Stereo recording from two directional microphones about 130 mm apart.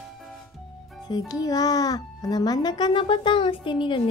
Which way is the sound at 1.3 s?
30° left (ahead or behind).